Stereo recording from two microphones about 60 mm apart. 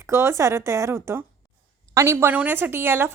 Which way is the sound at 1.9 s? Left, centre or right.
Right.